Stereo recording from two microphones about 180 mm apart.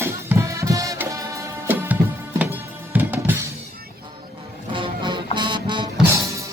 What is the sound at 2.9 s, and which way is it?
Drum, 10° right (ahead or behind).